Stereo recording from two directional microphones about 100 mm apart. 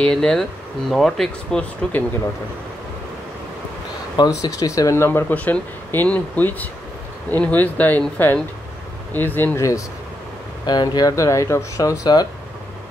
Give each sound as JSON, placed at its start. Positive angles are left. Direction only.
{"t": 0.0, "sound": "speech", "side_deg": 5}
{"t": 4.2, "sound": "speech", "side_deg": 35}
{"t": 5.3, "sound": "speech", "side_deg": 15}
{"t": 9.1, "sound": "speech", "side_deg": 20}
{"t": 9.6, "sound": "speech", "side_deg": 30}
{"t": 10.7, "sound": "speech", "side_deg": 45}